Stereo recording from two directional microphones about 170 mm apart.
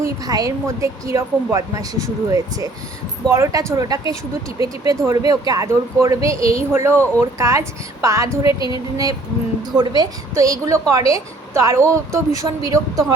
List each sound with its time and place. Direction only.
0.0 s a woman's voice: 20° right (ahead or behind)
8.4 s a woman's voice: 30° left (ahead or behind)
9.7 s a woman's voice: 25° right (ahead or behind)